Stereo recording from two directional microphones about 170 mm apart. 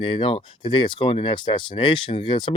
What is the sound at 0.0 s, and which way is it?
Speech, 30° left (ahead or behind).